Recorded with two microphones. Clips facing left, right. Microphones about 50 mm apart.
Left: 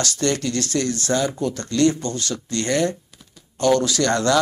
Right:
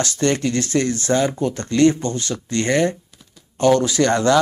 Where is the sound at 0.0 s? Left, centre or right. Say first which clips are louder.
Right 3 dB; right.